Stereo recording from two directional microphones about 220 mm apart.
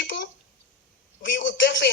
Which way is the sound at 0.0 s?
55° left (ahead or behind).